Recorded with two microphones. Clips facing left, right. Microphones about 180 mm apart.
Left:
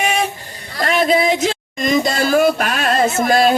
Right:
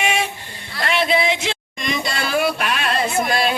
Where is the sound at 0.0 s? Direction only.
40° left (ahead or behind).